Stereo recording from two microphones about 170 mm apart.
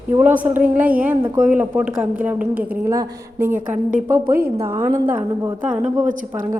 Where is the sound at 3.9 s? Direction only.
55° right (ahead or behind).